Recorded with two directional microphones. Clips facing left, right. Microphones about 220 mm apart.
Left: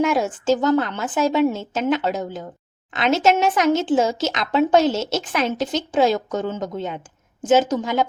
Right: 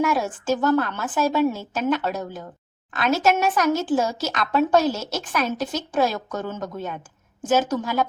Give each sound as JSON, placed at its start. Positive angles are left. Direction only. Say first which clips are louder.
{"t": 0.0, "sound": "a woman's voice", "louder": "left 3 dB", "side_deg": 20}